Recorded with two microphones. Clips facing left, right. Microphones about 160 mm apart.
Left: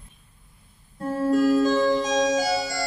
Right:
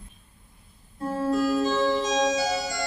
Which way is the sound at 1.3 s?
45° left (ahead or behind).